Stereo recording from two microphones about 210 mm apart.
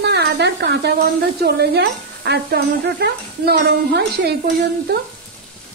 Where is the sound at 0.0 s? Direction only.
55° right (ahead or behind).